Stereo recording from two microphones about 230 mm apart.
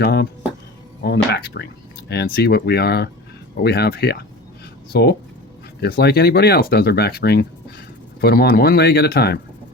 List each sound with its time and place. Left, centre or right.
0.0 s speech: left